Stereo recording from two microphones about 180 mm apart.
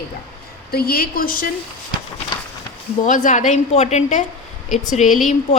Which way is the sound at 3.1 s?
45° left (ahead or behind).